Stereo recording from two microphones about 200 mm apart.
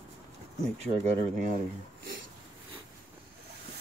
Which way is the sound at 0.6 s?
35° right (ahead or behind).